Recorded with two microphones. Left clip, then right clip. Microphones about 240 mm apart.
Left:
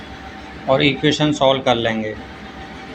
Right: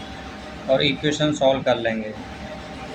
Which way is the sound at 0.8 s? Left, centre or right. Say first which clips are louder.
Left 4 dB; centre.